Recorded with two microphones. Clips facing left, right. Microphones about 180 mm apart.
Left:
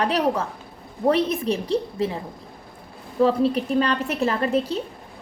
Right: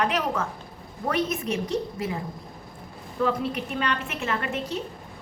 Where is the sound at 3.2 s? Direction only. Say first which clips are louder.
Left 7 dB; 30° left (ahead or behind).